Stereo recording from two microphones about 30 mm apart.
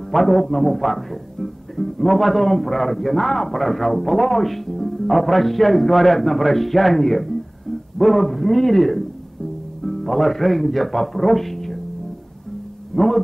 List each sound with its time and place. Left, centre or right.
0.1 s a man's voice: centre
12.9 s a man's voice: centre